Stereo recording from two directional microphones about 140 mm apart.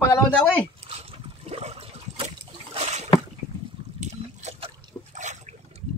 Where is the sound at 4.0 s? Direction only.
55° right (ahead or behind).